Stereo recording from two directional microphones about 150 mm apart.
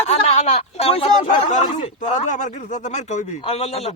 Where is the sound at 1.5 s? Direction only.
55° left (ahead or behind).